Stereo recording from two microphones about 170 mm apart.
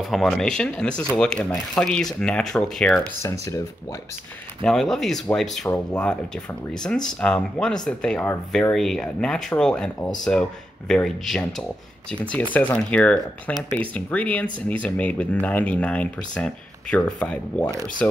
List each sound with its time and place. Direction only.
0.0 s speech: centre (ahead or behind)
3.2 s speech: 20° left (ahead or behind)
4.6 s speech: centre (ahead or behind)